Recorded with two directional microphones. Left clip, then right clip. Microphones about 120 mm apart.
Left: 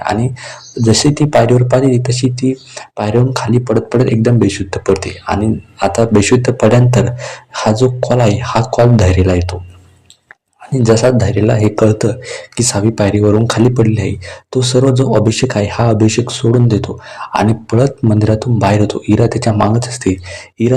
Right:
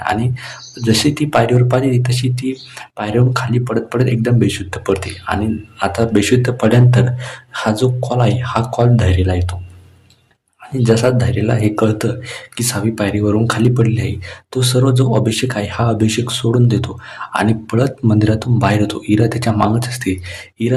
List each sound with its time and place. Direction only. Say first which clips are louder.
0.0 s speech: left 2 dB; 25° left (ahead or behind)
10.8 s speech: left 4 dB; 25° left (ahead or behind)